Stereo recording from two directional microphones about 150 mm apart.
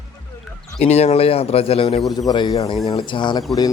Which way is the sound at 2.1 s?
25° left (ahead or behind).